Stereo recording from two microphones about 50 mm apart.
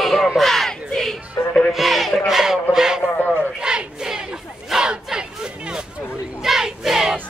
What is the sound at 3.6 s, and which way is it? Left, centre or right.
Battle cry, centre.